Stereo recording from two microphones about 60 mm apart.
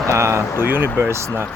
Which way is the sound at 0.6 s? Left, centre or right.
Right.